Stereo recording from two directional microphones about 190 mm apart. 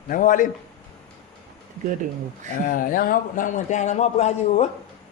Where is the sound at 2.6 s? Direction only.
45° left (ahead or behind).